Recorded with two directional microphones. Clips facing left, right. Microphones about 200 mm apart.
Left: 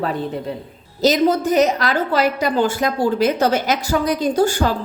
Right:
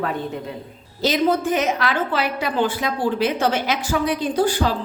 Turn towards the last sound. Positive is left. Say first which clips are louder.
# left 3 dB
turn(degrees=45)  # may be behind; listen again after turning